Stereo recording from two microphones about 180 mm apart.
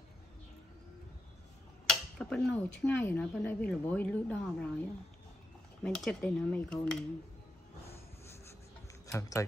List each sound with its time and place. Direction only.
1.9 s speech: 5° left (ahead or behind)
5.9 s speech: 5° left (ahead or behind)
9.0 s speech: 20° left (ahead or behind)